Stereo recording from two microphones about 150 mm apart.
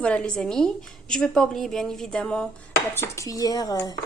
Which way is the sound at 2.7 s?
20° left (ahead or behind).